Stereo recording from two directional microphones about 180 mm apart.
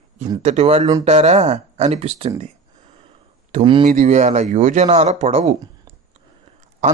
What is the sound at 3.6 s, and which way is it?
Speech, 30° right (ahead or behind).